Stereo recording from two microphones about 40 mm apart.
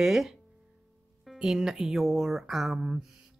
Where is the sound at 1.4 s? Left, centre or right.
Centre.